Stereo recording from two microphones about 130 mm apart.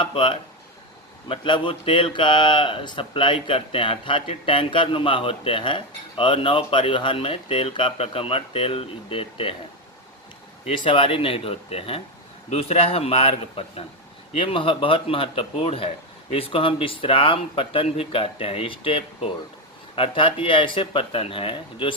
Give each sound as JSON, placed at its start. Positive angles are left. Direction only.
{"t": 0.0, "sound": "speech", "side_deg": 45}
{"t": 10.7, "sound": "speech", "side_deg": 45}